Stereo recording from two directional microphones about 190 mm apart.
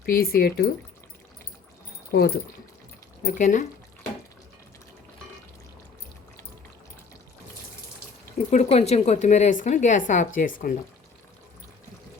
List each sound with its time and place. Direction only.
0.0 s speech: 55° left (ahead or behind)
2.1 s speech: 55° left (ahead or behind)
3.2 s a woman's voice: 40° left (ahead or behind)
8.4 s a woman's voice: 35° left (ahead or behind)